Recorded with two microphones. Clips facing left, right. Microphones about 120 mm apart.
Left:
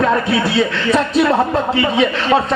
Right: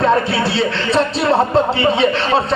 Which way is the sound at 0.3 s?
30° right (ahead or behind).